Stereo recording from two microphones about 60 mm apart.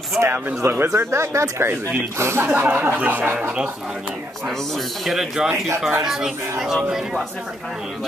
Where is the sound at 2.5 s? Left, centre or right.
Right.